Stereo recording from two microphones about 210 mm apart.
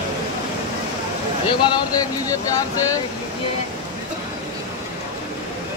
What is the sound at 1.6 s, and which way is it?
Speech, 15° left (ahead or behind).